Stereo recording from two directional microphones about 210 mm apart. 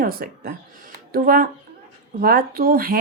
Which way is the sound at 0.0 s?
45° right (ahead or behind).